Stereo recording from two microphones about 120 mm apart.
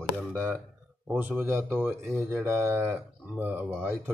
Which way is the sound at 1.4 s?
20° right (ahead or behind).